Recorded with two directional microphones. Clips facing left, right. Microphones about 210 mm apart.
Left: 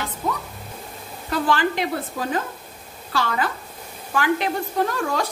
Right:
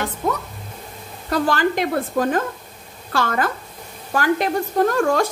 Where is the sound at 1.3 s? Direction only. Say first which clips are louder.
Right 2 dB; 45° right (ahead or behind).